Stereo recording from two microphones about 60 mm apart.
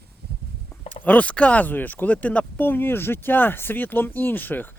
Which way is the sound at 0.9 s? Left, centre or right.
Left.